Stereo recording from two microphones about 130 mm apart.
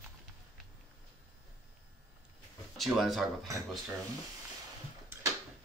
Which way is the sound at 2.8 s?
Centre (ahead or behind).